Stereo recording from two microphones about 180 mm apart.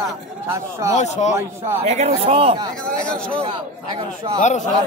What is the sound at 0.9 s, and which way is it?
Speech, 40° left (ahead or behind).